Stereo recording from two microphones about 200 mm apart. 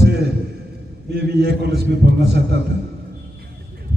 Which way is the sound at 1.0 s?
55° right (ahead or behind).